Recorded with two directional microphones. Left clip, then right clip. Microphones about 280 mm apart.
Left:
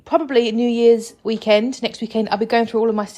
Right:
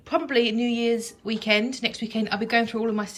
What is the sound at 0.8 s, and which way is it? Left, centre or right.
Speech, left.